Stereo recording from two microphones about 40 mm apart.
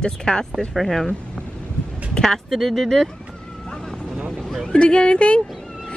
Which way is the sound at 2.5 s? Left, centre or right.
Centre.